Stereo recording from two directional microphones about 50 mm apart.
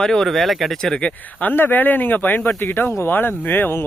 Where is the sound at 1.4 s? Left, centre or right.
Left.